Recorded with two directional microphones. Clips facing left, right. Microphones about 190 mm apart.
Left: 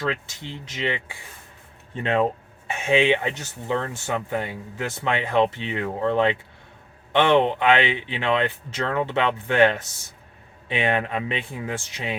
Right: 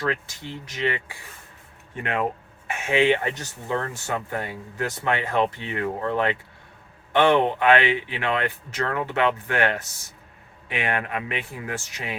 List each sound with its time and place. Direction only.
0.1 s speech: 20° left (ahead or behind)
2.8 s speech: 20° left (ahead or behind)